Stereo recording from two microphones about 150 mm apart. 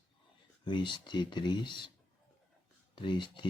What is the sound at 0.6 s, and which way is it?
Speech, 30° left (ahead or behind).